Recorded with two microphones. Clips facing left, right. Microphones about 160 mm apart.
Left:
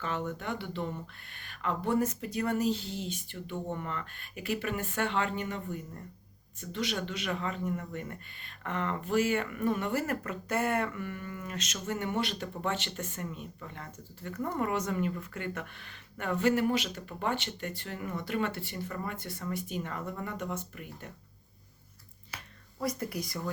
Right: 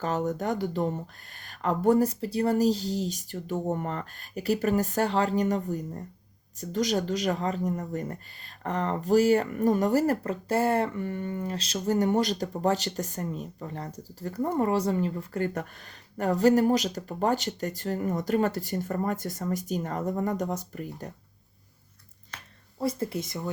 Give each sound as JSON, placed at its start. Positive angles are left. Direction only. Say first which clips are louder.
{"t": 0.0, "sound": "speech", "louder": "right 7 dB", "side_deg": -40}
{"t": 22.3, "sound": "a sound", "louder": "even", "side_deg": 10}
{"t": 22.8, "sound": "speech", "louder": "right 5 dB", "side_deg": -25}